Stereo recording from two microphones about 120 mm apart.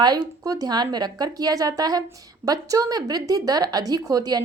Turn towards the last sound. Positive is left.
turn(degrees=-30)  # may be behind; listen again after turning